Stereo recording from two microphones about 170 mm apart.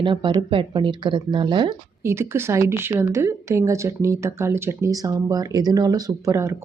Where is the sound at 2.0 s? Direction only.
15° right (ahead or behind).